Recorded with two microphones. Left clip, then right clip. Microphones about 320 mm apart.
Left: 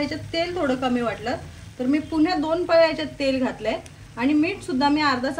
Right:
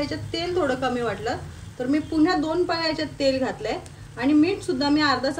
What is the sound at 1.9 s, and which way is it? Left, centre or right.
A woman's voice, centre.